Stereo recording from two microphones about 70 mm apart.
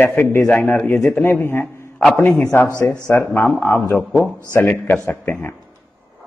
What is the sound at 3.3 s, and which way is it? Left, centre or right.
Speech, centre.